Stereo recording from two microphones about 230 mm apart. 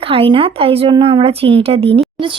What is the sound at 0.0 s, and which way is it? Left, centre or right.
Speech, right.